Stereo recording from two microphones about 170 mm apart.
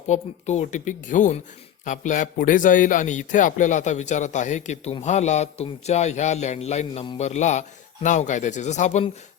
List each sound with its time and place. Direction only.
0.1 s a man's voice: 40° left (ahead or behind)